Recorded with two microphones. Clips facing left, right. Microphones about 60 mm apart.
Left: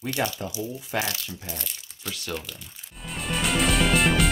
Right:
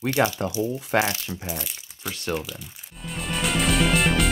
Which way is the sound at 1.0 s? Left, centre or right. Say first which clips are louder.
Right 5 dB; right.